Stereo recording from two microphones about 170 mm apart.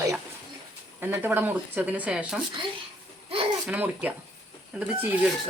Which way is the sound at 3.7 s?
10° right (ahead or behind).